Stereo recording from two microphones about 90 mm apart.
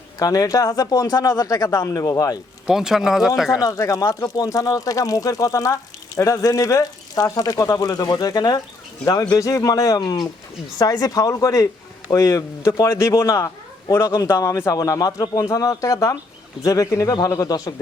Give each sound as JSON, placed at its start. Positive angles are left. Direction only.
{"t": 0.2, "sound": "speech", "side_deg": 40}
{"t": 2.6, "sound": "speech", "side_deg": -5}
{"t": 3.6, "sound": "speech", "side_deg": 35}